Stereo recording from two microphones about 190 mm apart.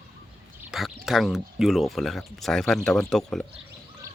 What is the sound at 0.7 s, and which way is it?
Speech, centre (ahead or behind).